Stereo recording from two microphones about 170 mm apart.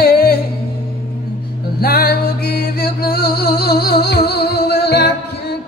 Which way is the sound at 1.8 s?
65° left (ahead or behind).